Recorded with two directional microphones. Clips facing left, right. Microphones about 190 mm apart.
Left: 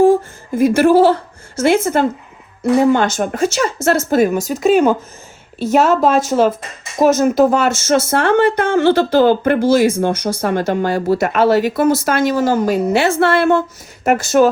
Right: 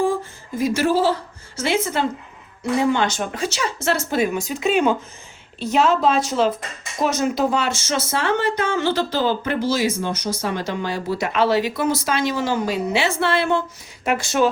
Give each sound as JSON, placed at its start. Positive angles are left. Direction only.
{"t": 0.5, "sound": "a woman's voice", "side_deg": 55}